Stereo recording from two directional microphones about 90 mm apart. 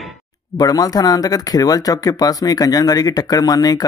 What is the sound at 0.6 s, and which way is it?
Speech, 45° left (ahead or behind).